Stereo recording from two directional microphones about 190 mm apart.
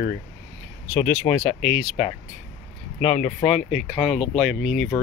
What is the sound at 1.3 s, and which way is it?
Speech, 25° left (ahead or behind).